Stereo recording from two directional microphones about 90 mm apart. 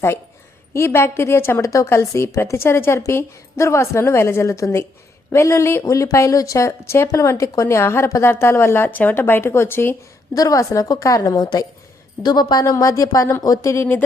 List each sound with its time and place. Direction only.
0.7 s a woman's voice: 30° left (ahead or behind)
10.3 s a woman's voice: 40° left (ahead or behind)
12.6 s a woman's voice: 35° left (ahead or behind)